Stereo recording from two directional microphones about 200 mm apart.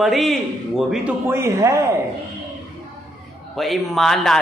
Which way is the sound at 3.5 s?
Centre (ahead or behind).